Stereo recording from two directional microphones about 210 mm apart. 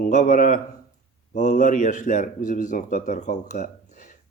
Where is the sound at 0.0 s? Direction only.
35° left (ahead or behind).